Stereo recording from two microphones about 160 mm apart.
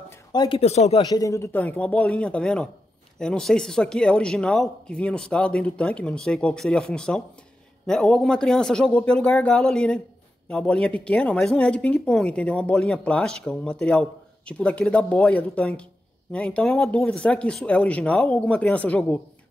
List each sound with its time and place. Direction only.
0.3 s speech: 25° left (ahead or behind)
0.6 s speech: 40° left (ahead or behind)
1.0 s a woman's voice: 20° left (ahead or behind)